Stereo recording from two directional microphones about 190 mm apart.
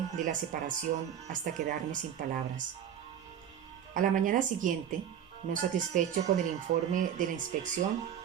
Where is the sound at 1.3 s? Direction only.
45° right (ahead or behind).